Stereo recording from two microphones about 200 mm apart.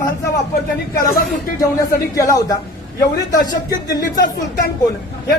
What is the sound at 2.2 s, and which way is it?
Speech, 15° left (ahead or behind).